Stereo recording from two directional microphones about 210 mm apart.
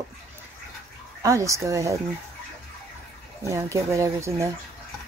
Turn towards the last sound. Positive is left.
turn(degrees=-15)  # may be behind; listen again after turning